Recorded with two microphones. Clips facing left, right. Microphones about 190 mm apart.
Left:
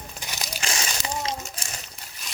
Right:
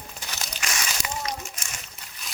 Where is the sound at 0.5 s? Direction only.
30° left (ahead or behind).